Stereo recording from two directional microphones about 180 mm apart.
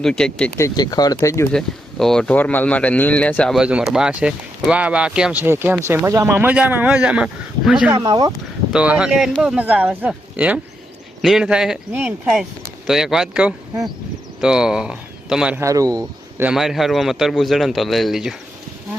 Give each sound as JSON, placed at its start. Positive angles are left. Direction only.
{"t": 0.0, "sound": "speech", "side_deg": 5}
{"t": 1.5, "sound": "speech", "side_deg": 5}
{"t": 7.9, "sound": "speech", "side_deg": -25}
{"t": 8.7, "sound": "speech", "side_deg": -5}
{"t": 15.6, "sound": "speech", "side_deg": -20}
{"t": 16.5, "sound": "speech", "side_deg": 0}